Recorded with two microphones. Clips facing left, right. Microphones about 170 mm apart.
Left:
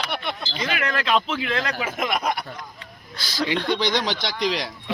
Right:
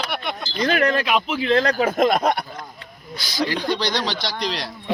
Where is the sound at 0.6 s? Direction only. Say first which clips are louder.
Right 9 dB; 40° right (ahead or behind).